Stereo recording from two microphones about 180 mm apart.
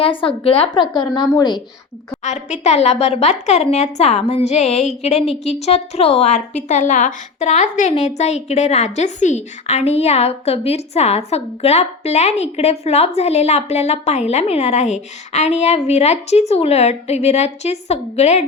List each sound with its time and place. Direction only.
0.0 s a woman's voice: 30° left (ahead or behind)
2.2 s a woman's voice: 40° left (ahead or behind)